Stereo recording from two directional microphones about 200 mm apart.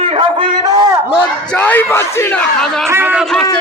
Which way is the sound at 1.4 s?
10° left (ahead or behind).